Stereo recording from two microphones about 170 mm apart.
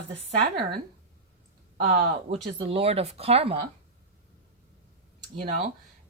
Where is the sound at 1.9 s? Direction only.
45° right (ahead or behind).